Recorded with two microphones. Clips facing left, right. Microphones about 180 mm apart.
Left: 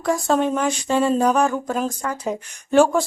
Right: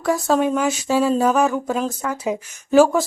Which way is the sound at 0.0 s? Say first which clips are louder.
Right 1 dB; centre (ahead or behind).